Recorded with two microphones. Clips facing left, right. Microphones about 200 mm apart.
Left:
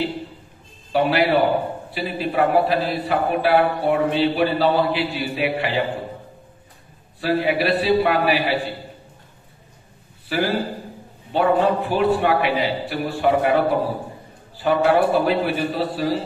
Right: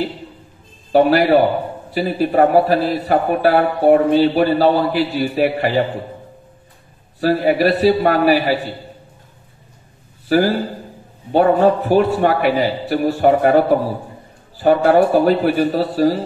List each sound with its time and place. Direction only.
0.9 s a man's voice: 45° right (ahead or behind)
7.2 s a man's voice: 40° right (ahead or behind)
10.2 s a man's voice: 40° right (ahead or behind)